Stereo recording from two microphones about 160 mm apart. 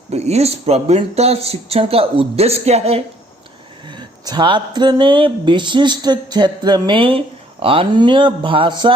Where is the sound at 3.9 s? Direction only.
25° right (ahead or behind).